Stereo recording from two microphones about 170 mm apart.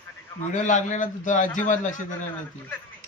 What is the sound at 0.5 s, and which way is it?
A man's voice, 45° left (ahead or behind).